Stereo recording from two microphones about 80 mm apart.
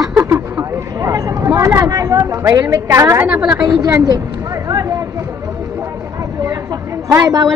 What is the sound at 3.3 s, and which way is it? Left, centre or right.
Speech, centre.